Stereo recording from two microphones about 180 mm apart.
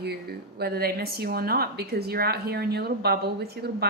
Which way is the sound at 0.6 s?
60° right (ahead or behind).